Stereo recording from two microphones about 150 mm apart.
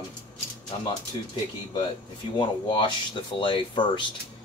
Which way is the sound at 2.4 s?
30° left (ahead or behind).